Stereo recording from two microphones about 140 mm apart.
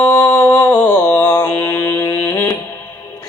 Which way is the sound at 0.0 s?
15° left (ahead or behind).